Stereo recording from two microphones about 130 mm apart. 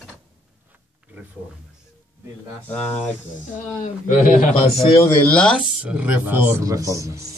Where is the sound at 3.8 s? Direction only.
80° left.